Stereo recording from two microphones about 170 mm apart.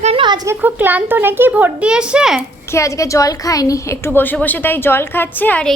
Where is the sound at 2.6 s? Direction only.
15° left (ahead or behind).